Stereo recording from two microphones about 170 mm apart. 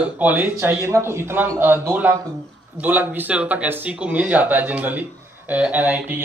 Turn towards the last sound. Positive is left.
turn(degrees=-10)  # may be behind; listen again after turning